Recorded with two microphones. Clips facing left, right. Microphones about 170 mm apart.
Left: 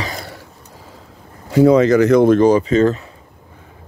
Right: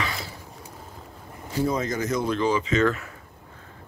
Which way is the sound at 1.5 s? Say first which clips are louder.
Left 15 dB; 85° left.